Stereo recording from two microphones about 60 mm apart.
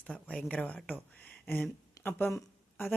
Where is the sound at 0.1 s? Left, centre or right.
Centre.